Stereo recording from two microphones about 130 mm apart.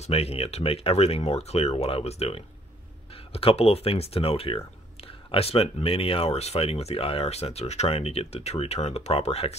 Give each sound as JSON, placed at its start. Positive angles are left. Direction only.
{"t": 0.0, "sound": "speech", "side_deg": 50}